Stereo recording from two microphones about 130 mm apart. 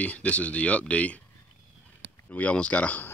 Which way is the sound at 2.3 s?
10° left (ahead or behind).